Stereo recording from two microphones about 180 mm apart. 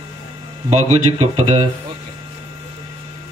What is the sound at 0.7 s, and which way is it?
Speech, 35° right (ahead or behind).